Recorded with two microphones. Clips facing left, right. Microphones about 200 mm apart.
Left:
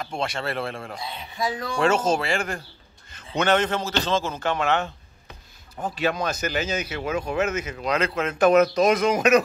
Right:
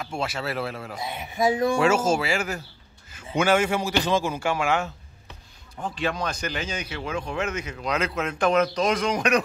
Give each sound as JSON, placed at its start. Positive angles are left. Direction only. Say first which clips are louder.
{"t": 0.0, "sound": "speech", "louder": "left 1 dB", "side_deg": -5}
{"t": 1.0, "sound": "speech", "louder": "right 6 dB", "side_deg": -25}
{"t": 1.8, "sound": "a man's voice", "louder": "even", "side_deg": -5}
{"t": 5.9, "sound": "speech", "louder": "left 3 dB", "side_deg": 5}